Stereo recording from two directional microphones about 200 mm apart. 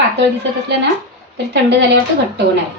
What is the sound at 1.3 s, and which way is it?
Speech, 60° right (ahead or behind).